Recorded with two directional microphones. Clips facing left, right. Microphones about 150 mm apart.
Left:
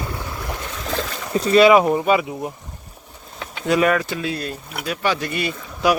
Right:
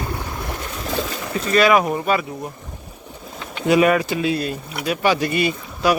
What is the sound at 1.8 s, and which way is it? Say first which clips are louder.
Speech: left 3 dB; 10° left (ahead or behind).